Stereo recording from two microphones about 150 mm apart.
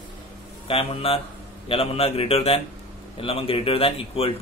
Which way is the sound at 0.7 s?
40° left (ahead or behind).